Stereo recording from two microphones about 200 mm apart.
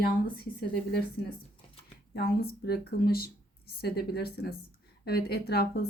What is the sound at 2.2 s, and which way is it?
A woman's voice, 50° left (ahead or behind).